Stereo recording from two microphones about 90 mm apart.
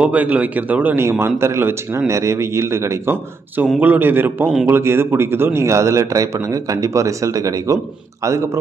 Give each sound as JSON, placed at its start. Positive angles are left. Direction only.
{"t": 0.0, "sound": "a man's voice", "side_deg": -15}